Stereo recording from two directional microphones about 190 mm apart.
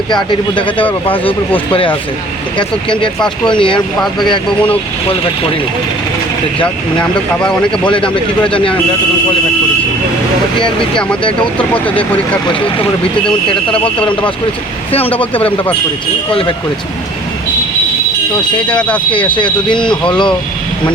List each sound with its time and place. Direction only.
0.1 s speech: 25° left (ahead or behind)
4.0 s speech: centre (ahead or behind)
7.9 s speech: 25° left (ahead or behind)
11.5 s speech: 10° left (ahead or behind)
14.0 s speech: 5° left (ahead or behind)
14.9 s speech: 30° left (ahead or behind)
15.2 s speech: 10° left (ahead or behind)
18.7 s speech: 5° left (ahead or behind)
19.1 s speech: 25° left (ahead or behind)